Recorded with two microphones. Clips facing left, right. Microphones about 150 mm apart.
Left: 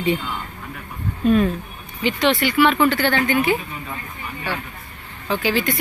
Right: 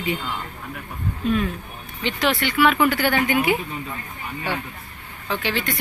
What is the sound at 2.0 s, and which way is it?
Speech, centre (ahead or behind).